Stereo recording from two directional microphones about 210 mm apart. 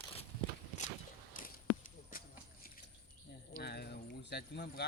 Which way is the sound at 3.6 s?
50° left (ahead or behind).